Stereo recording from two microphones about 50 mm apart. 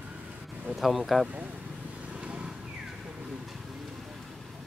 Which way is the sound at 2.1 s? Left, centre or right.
Right.